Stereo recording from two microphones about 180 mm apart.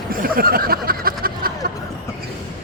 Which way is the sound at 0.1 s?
55° right (ahead or behind).